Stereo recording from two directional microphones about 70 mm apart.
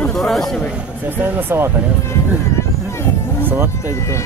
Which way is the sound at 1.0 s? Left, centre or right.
Right.